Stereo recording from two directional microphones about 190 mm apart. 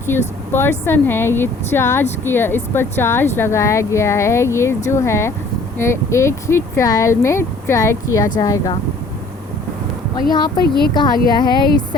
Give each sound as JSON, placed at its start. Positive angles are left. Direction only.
{"t": 0.1, "sound": "speech", "side_deg": 10}
{"t": 10.6, "sound": "speech", "side_deg": 55}
{"t": 11.3, "sound": "speech", "side_deg": 25}